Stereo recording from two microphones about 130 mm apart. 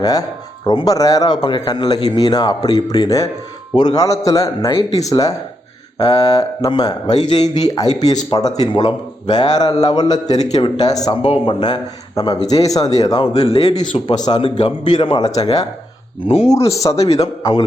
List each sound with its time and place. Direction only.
0.0 s speech: 30° left (ahead or behind)
15.2 s speech: 55° left (ahead or behind)
16.7 s speech: 25° left (ahead or behind)
17.0 s speech: 50° left (ahead or behind)
17.4 s a man's voice: 35° left (ahead or behind)